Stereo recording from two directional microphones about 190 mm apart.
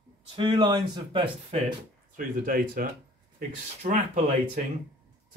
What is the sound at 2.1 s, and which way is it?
Speech, 50° right (ahead or behind).